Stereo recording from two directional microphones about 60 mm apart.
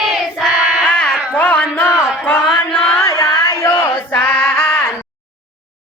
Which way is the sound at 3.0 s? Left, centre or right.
Left.